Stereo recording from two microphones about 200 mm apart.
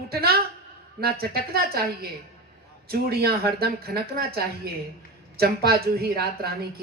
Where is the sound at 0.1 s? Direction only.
50° right (ahead or behind).